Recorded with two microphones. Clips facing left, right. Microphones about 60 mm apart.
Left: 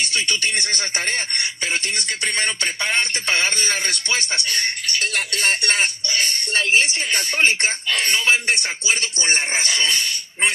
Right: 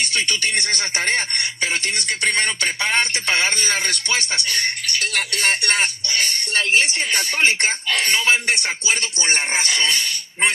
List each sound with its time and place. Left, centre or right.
0.6 s speech: right
7.1 s speech: right
9.3 s speech: right